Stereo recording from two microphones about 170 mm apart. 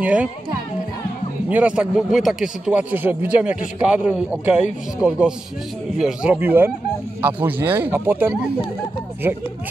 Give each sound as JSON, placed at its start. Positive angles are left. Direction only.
{"t": 0.0, "sound": "a man's voice", "side_deg": -10}
{"t": 1.5, "sound": "a man's voice", "side_deg": -10}